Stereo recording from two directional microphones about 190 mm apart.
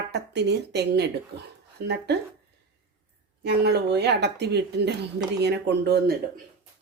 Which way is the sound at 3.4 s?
60° right (ahead or behind).